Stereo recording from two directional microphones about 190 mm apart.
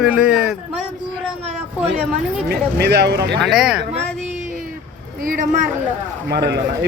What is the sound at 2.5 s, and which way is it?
Speech, 60° right (ahead or behind).